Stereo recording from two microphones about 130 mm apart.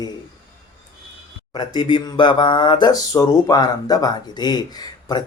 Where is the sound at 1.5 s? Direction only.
35° left (ahead or behind).